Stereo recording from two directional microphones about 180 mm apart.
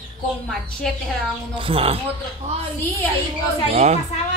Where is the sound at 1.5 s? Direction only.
30° right (ahead or behind).